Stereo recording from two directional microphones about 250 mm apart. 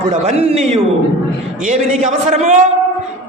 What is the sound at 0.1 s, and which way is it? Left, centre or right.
A man's voice, right.